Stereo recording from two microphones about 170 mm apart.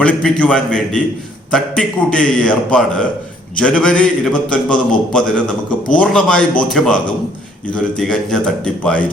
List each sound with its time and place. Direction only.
0.0 s a man's voice: 5° left (ahead or behind)